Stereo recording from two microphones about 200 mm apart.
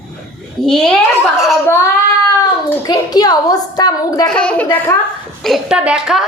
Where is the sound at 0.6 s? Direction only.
Centre (ahead or behind).